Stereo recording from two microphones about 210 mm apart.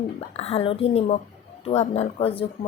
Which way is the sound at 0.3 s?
30° left (ahead or behind).